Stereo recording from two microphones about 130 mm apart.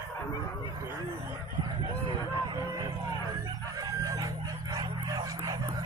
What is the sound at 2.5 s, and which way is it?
Music, 25° right (ahead or behind).